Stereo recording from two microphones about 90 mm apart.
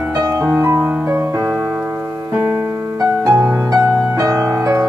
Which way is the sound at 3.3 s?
20° right (ahead or behind).